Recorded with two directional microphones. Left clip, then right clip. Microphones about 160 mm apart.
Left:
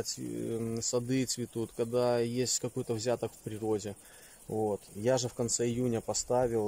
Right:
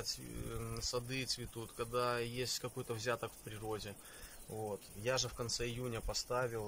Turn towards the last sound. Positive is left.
turn(degrees=40)  # may be behind; listen again after turning